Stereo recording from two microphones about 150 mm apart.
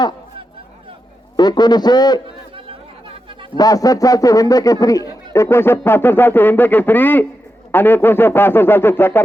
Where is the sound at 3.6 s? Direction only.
25° left (ahead or behind).